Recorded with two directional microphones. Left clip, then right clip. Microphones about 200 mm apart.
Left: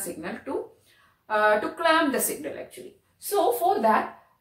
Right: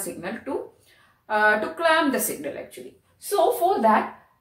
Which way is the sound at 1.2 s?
15° right (ahead or behind).